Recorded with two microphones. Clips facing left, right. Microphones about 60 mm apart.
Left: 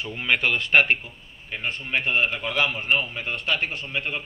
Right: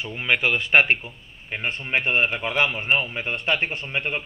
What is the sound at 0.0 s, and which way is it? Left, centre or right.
Speech, centre.